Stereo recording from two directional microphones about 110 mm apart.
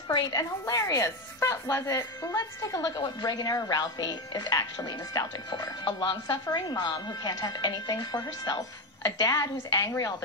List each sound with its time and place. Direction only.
0.1 s speech: 40° left (ahead or behind)